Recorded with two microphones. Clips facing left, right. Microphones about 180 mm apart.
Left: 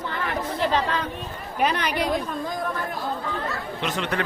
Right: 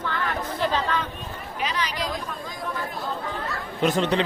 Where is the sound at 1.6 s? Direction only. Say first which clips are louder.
Left 5 dB; 55° left (ahead or behind).